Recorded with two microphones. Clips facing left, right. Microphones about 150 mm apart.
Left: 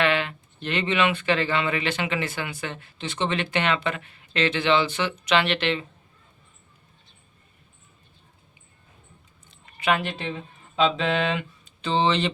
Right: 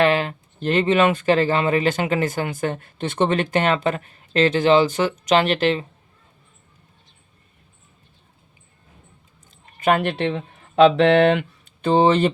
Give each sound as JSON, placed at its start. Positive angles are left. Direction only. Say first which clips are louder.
{"t": 0.0, "sound": "speech", "louder": "right 5 dB", "side_deg": -40}
{"t": 9.7, "sound": "speech", "louder": "right 6 dB", "side_deg": -45}